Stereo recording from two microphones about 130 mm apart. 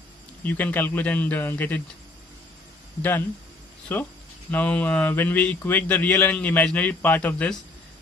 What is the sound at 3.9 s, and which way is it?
Speech, 15° left (ahead or behind).